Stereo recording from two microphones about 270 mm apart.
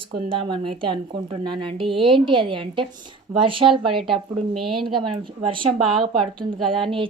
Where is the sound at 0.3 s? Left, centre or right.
Centre.